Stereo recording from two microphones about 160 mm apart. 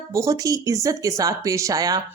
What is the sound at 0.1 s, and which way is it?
A woman's voice, 20° right (ahead or behind).